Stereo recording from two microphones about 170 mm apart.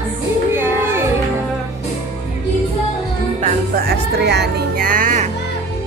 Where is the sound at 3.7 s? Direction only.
65° right (ahead or behind); by 5.3 s 50° right (ahead or behind).